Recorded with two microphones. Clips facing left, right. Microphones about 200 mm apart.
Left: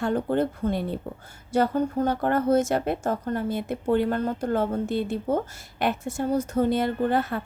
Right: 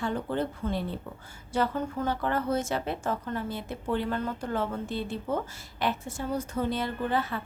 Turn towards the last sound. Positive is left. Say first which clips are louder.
# left 5 dB
turn(degrees=50)  # may be behind; listen again after turning